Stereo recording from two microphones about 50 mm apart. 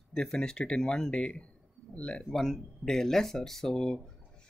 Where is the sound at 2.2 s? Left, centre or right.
Centre.